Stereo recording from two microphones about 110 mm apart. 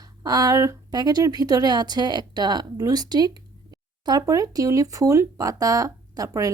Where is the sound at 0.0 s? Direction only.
35° right (ahead or behind).